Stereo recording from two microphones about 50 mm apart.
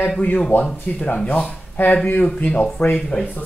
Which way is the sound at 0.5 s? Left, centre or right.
Left.